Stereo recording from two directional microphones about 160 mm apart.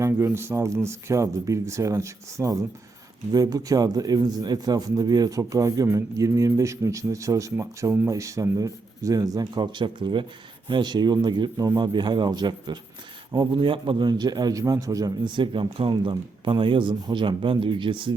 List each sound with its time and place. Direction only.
0.0 s a man's voice: 15° right (ahead or behind)